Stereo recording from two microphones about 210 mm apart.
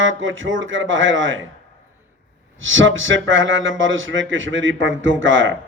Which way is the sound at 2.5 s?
65° right (ahead or behind).